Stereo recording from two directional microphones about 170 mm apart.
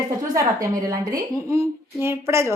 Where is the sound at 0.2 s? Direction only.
20° right (ahead or behind).